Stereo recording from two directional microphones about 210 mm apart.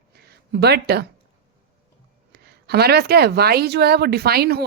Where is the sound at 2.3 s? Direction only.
50° right (ahead or behind).